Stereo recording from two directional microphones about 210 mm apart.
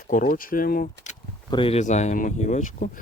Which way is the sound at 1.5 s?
25° left (ahead or behind).